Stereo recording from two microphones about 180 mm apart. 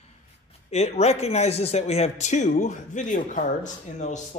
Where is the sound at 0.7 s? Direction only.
35° left (ahead or behind).